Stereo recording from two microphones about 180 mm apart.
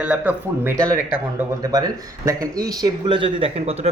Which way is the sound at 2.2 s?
20° right (ahead or behind).